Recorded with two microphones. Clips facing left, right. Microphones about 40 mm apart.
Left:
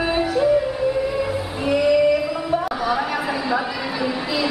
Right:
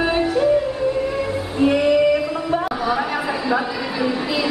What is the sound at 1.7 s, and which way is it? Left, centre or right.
Singing, centre.